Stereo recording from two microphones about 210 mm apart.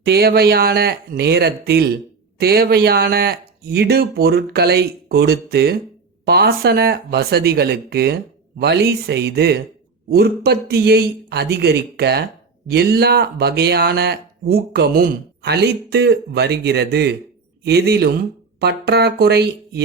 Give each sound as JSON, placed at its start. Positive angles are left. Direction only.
{"t": 0.0, "sound": "speech", "side_deg": -50}